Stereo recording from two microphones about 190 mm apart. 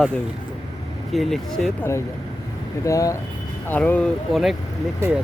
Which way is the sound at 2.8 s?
15° left (ahead or behind).